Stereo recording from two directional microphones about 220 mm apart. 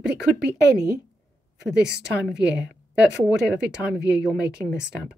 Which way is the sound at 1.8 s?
50° right (ahead or behind).